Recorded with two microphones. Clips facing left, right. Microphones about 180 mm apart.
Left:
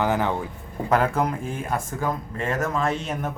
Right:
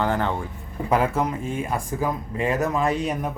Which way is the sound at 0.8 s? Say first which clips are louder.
Even; 5° right (ahead or behind).